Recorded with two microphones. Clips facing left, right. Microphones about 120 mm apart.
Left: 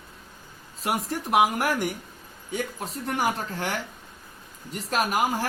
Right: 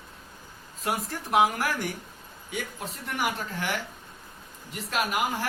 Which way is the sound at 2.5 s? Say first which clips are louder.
Left 4 dB; 40° left (ahead or behind).